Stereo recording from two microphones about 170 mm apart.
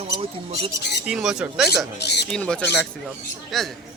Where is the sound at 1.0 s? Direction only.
5° right (ahead or behind).